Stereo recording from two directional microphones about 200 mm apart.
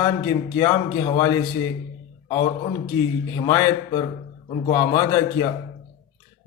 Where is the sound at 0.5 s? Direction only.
20° left (ahead or behind).